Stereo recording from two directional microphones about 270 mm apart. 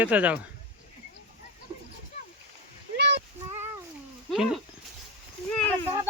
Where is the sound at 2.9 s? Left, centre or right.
Right.